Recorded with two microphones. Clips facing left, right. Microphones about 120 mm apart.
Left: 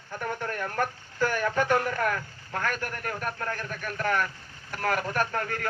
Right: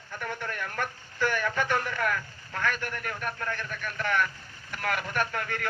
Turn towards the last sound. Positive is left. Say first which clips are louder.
# left 2 dB
turn(degrees=40)  # may be behind; listen again after turning